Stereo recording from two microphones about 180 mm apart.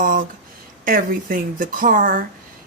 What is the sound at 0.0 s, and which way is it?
Speech, 45° right (ahead or behind).